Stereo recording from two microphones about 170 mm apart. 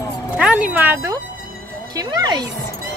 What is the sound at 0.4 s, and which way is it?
A woman's voice, 5° right (ahead or behind).